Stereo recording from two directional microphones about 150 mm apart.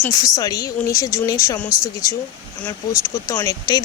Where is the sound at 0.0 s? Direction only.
25° left (ahead or behind).